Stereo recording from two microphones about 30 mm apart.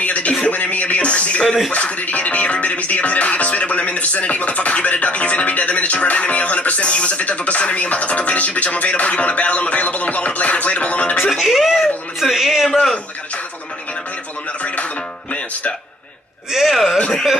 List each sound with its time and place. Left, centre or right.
0.0 s a sound: left
0.5 s music: left
11.3 s whimper: centre
16.5 s speech: centre